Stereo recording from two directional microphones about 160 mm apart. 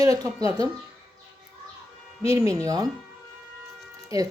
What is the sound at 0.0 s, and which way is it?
Speech, 20° right (ahead or behind).